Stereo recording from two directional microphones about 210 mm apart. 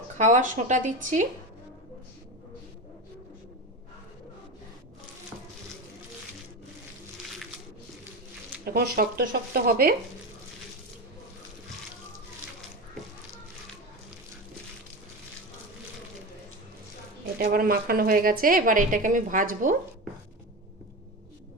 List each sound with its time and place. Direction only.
0.2 s speech: 35° right (ahead or behind)
8.6 s a woman's voice: 45° right (ahead or behind)
17.3 s a woman's voice: 45° right (ahead or behind)